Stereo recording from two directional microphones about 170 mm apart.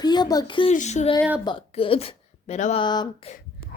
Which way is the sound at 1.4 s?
30° left (ahead or behind).